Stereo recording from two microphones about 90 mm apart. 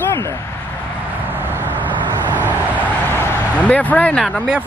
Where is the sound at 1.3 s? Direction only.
25° right (ahead or behind).